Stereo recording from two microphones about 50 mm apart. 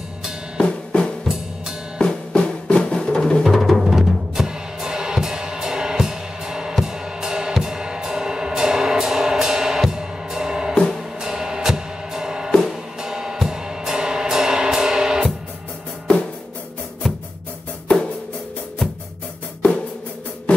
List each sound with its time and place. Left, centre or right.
0.6 s drum kit: centre
2.0 s drum: centre
3.4 s music: centre
6.8 s drum kit: centre
7.5 s music: centre
17.8 s music: centre